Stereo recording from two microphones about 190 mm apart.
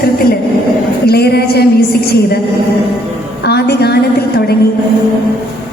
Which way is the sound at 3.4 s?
60° left (ahead or behind).